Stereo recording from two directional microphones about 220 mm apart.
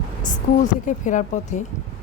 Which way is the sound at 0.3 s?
35° left (ahead or behind).